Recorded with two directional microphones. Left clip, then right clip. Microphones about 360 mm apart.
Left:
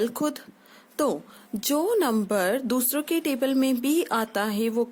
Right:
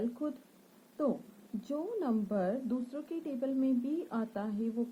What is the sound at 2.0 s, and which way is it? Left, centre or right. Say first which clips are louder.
A woman's voice: left 10 dB; left.